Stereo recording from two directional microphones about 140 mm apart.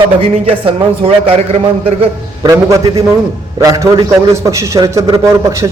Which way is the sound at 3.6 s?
20° right (ahead or behind).